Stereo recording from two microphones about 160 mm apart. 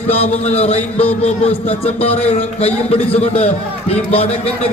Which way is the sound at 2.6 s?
40° left (ahead or behind).